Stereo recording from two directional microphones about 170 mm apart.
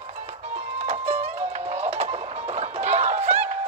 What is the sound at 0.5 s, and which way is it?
Music, 40° right (ahead or behind).